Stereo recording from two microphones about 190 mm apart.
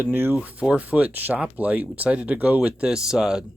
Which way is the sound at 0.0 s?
10° right (ahead or behind).